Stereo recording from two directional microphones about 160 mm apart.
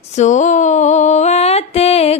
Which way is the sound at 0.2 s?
50° left (ahead or behind).